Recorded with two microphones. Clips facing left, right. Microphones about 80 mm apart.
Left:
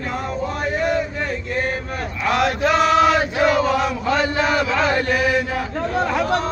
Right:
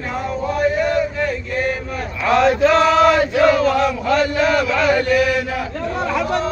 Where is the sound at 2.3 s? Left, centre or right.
Centre; by 5.1 s left.